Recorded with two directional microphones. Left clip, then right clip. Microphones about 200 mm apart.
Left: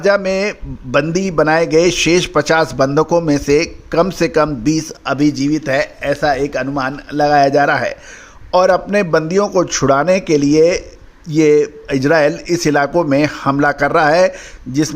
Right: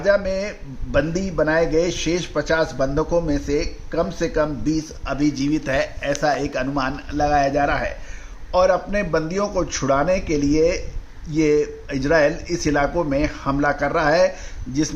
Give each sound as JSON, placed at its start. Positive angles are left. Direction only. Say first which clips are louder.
{"t": 0.0, "sound": "a man's voice", "louder": "left 5 dB", "side_deg": 40}